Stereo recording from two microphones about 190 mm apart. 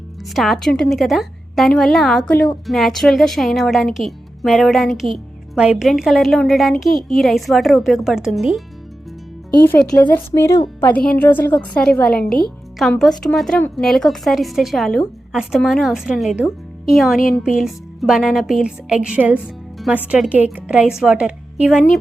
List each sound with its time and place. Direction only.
0.3 s a woman's voice: centre (ahead or behind)
9.6 s a woman's voice: 10° left (ahead or behind)